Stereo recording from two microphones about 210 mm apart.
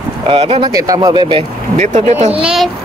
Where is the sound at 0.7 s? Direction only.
15° right (ahead or behind); by 2.4 s 30° right (ahead or behind).